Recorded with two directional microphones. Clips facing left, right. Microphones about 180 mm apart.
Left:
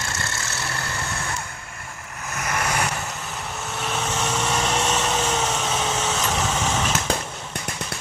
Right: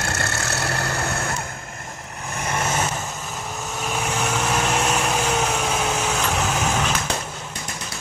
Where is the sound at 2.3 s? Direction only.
30° right (ahead or behind).